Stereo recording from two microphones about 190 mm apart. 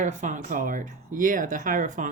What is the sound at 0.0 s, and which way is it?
Speech, 40° right (ahead or behind).